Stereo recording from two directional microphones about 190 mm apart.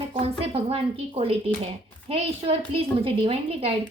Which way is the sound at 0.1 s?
30° right (ahead or behind).